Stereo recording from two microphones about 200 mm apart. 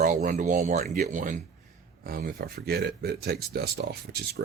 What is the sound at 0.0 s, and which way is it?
Speech, 40° right (ahead or behind).